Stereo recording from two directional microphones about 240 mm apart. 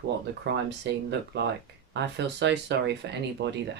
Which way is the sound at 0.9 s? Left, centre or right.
Right.